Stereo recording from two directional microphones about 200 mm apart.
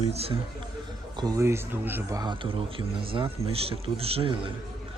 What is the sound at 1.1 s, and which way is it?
Speech, 15° right (ahead or behind).